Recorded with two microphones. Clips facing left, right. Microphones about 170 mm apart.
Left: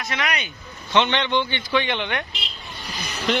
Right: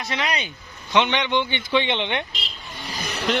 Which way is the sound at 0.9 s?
15° right (ahead or behind).